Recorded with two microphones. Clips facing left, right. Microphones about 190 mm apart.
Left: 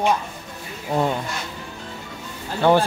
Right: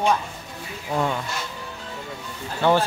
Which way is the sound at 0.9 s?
25° left (ahead or behind).